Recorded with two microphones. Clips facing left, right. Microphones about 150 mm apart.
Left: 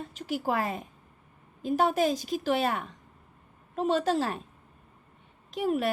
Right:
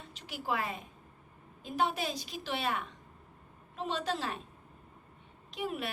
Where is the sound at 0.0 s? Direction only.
45° left (ahead or behind).